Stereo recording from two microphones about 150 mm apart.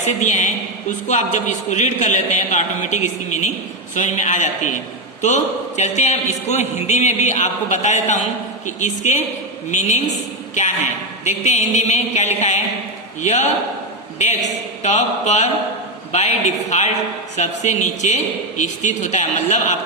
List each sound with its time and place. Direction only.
0.0 s a woman's voice: 50° left (ahead or behind)
11.2 s a woman's voice: 50° left (ahead or behind)
14.8 s a woman's voice: 50° left (ahead or behind)